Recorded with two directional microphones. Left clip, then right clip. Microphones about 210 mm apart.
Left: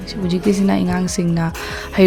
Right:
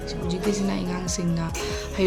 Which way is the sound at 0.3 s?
40° left (ahead or behind).